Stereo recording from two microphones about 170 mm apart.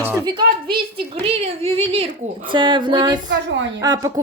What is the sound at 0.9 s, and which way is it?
A woman's voice, 35° right (ahead or behind).